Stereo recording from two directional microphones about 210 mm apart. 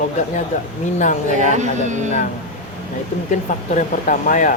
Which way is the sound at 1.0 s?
35° left (ahead or behind).